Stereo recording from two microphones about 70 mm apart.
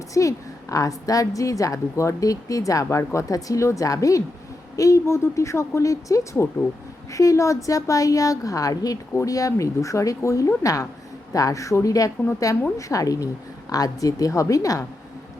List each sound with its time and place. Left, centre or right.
0.1 s a woman's voice: left